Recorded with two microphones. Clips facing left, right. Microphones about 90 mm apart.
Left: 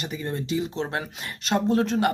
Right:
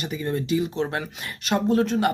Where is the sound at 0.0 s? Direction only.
35° left (ahead or behind).